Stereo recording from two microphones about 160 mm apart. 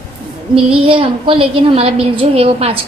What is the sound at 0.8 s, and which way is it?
A woman's voice, 35° right (ahead or behind).